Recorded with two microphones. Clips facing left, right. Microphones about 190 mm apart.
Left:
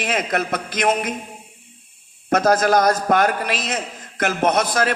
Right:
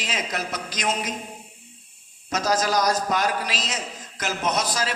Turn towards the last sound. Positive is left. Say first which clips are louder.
# left 7 dB
turn(degrees=55)  # may be behind; listen again after turning